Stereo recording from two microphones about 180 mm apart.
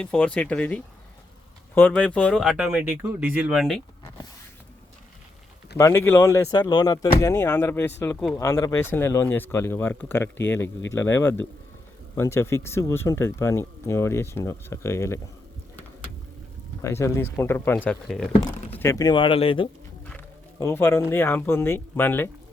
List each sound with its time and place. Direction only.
0.0 s speech: 5° left (ahead or behind)
5.7 s speech: 15° left (ahead or behind)
16.8 s speech: 15° left (ahead or behind)
18.8 s speech: 20° left (ahead or behind)
20.1 s a sound: 10° left (ahead or behind)
21.1 s speech: 10° left (ahead or behind)